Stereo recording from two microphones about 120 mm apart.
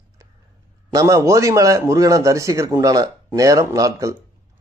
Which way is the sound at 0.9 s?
25° right (ahead or behind).